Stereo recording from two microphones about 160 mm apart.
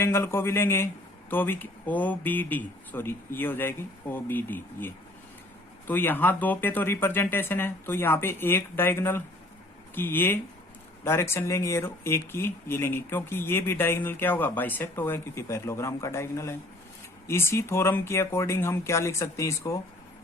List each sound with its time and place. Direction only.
0.0 s speech: 15° left (ahead or behind)
5.9 s speech: 10° left (ahead or behind)